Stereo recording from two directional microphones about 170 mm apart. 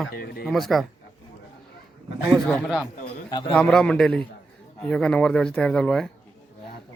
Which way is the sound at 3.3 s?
25° left (ahead or behind).